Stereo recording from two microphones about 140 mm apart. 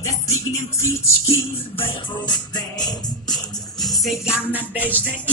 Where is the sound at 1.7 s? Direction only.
35° left (ahead or behind).